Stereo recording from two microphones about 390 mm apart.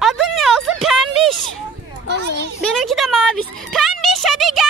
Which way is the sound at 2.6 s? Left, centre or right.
Centre.